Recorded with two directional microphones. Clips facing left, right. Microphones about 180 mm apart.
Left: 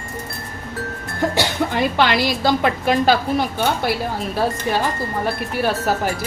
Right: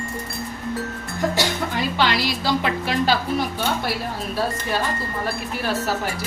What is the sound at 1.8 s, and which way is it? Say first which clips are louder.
A woman's voice: left 4 dB; 55° left (ahead or behind).